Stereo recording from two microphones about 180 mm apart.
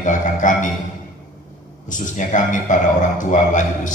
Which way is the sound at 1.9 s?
45° left (ahead or behind).